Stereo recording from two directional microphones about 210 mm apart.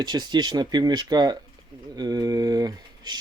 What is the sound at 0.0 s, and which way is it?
Speech, 20° right (ahead or behind).